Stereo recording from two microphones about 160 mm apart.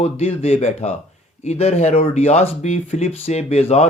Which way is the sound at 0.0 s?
40° left (ahead or behind).